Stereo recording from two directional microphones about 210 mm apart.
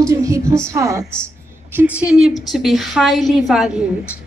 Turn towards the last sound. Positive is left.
turn(degrees=-5)  # may be behind; listen again after turning